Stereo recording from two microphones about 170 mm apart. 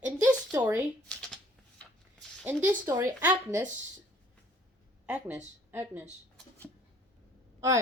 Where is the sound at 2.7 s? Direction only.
15° right (ahead or behind).